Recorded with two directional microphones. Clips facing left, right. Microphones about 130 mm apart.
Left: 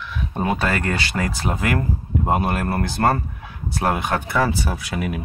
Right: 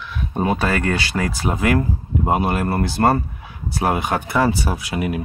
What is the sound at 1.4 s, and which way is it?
Speech, 20° right (ahead or behind).